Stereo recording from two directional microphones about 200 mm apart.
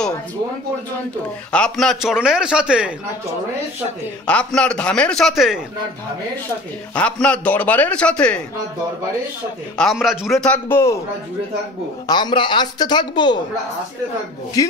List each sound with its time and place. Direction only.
1.5 s speech: 5° left (ahead or behind)
4.3 s speech: 5° left (ahead or behind)
7.0 s speech: 5° left (ahead or behind)
9.8 s speech: centre (ahead or behind)
12.1 s speech: 20° left (ahead or behind)
14.6 s speech: 20° left (ahead or behind)